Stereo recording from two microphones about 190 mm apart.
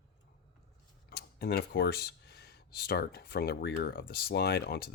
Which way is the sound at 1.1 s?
55° left (ahead or behind).